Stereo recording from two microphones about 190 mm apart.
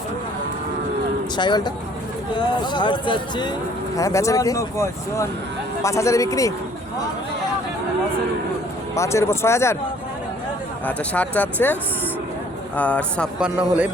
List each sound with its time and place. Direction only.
1.4 s speech: 25° left (ahead or behind)
9.0 s speech: 15° left (ahead or behind)
10.8 s speech: 10° left (ahead or behind)
12.7 s speech: 5° left (ahead or behind)
13.4 s a man's voice: 5° right (ahead or behind)